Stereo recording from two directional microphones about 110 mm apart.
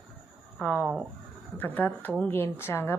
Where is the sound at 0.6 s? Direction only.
10° left (ahead or behind).